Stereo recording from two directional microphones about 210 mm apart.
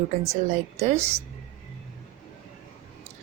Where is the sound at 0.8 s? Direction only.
30° right (ahead or behind).